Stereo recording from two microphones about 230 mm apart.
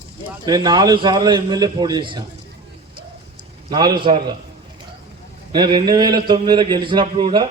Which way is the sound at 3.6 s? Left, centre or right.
Centre.